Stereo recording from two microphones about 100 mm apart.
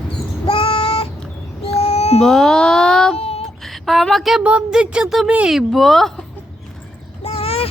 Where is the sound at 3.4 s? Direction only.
5° left (ahead or behind).